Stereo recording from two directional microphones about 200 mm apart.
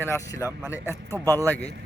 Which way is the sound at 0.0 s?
15° left (ahead or behind).